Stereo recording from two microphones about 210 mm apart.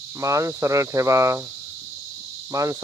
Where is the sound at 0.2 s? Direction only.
15° right (ahead or behind).